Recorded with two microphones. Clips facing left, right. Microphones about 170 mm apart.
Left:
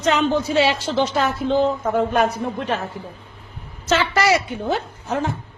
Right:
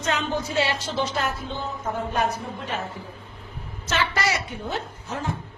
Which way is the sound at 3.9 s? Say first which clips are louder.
Left 8 dB; 90° left.